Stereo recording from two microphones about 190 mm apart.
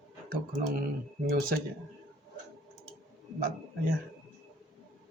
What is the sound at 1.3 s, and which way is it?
Speech, 50° right (ahead or behind).